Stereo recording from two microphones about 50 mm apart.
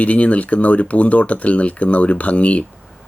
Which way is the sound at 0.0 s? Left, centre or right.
Left.